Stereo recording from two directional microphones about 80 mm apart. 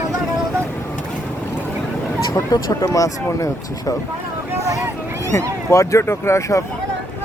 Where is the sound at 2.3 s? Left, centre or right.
Left.